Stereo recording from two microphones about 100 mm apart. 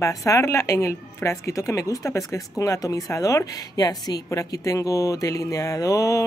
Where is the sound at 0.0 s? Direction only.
30° left (ahead or behind).